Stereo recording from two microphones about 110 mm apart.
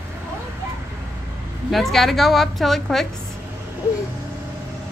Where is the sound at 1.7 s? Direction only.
Centre (ahead or behind).